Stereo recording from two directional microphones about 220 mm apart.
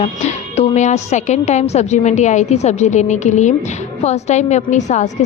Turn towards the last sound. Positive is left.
turn(degrees=30)  # may be behind; listen again after turning